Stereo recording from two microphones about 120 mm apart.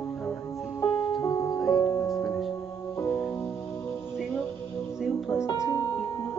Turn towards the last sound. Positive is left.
turn(degrees=25)  # may be behind; listen again after turning